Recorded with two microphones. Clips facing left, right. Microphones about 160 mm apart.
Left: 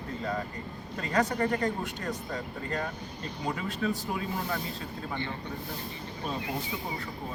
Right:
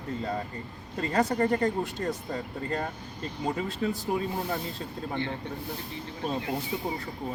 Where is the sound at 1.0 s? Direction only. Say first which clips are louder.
Right 2 dB; 30° right (ahead or behind).